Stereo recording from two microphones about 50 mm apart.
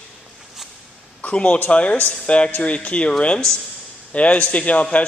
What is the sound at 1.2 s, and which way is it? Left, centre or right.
A man's voice, left.